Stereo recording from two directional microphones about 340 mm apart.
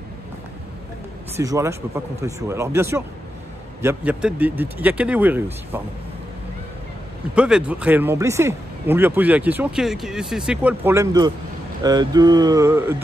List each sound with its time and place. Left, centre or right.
1.3 s speech: centre
7.3 s speech: centre